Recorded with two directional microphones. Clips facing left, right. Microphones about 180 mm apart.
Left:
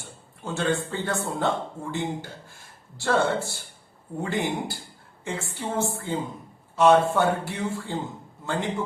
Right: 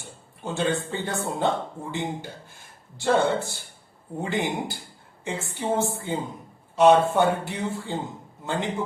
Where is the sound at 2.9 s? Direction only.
20° right (ahead or behind).